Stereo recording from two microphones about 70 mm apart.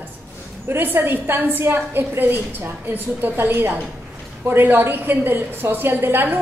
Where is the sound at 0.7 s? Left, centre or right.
Right.